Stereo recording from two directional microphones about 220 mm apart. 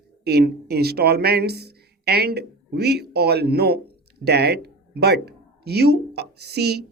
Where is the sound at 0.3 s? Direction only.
45° right (ahead or behind).